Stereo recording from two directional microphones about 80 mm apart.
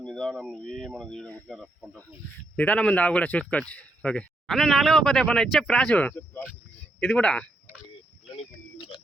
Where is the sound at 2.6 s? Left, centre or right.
Centre.